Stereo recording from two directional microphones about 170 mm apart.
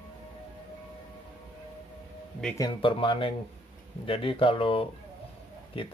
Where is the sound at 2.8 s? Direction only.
30° left (ahead or behind).